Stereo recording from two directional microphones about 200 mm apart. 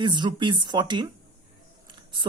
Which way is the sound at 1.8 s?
25° right (ahead or behind).